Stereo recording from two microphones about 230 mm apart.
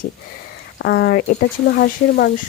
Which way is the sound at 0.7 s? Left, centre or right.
Left.